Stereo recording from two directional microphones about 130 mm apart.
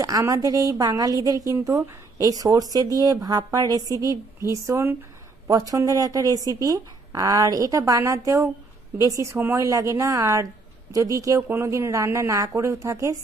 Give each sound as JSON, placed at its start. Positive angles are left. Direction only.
{"t": 0.0, "sound": "speech", "side_deg": -25}